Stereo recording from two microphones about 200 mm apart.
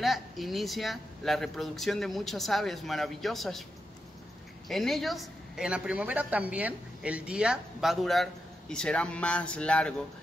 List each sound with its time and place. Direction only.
0.0 s a man's voice: centre (ahead or behind)
4.6 s a man's voice: centre (ahead or behind)